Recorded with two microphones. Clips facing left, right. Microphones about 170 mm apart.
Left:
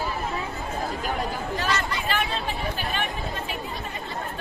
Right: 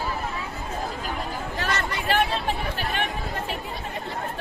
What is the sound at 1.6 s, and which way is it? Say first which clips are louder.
Chatter: even; 65° right (ahead or behind).